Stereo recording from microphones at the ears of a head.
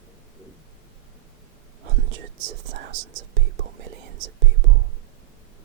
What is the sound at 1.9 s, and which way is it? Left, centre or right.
Whispering, right.